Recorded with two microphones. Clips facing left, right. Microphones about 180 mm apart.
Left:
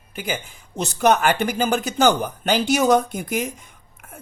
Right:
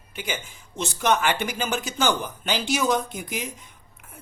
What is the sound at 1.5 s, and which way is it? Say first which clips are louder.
Speech: left 6 dB; 35° left (ahead or behind).